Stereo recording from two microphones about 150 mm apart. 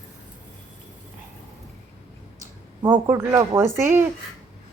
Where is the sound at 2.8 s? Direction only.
15° right (ahead or behind).